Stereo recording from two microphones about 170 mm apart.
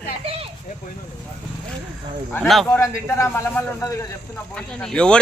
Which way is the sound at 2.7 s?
15° left (ahead or behind).